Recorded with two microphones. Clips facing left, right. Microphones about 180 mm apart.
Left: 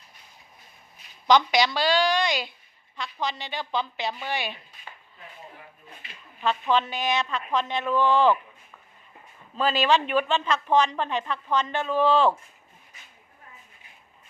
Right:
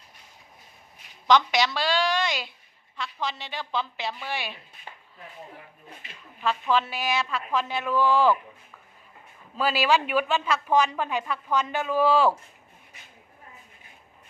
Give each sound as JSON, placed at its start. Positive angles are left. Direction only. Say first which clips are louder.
{"t": 1.3, "sound": "a woman's voice", "louder": "left 1 dB", "side_deg": 0}
{"t": 6.4, "sound": "a woman's voice", "louder": "left 1 dB", "side_deg": -5}
{"t": 9.6, "sound": "speech", "louder": "left 1 dB", "side_deg": -10}